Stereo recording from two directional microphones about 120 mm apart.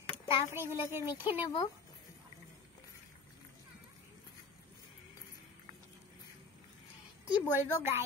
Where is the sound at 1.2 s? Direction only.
45° left (ahead or behind).